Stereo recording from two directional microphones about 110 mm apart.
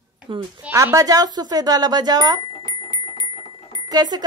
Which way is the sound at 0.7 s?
30° right (ahead or behind).